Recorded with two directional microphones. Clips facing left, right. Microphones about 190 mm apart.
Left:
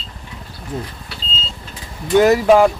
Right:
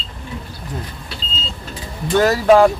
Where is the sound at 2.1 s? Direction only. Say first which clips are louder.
Left 4 dB; 15° left (ahead or behind).